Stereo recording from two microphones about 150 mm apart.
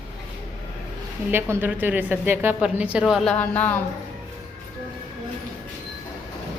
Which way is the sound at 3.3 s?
10° left (ahead or behind).